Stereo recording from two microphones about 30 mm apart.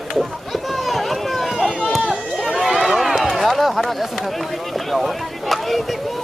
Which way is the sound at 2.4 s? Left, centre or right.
Centre.